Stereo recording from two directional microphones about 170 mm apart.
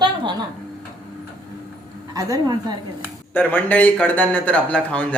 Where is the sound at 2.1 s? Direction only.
20° right (ahead or behind).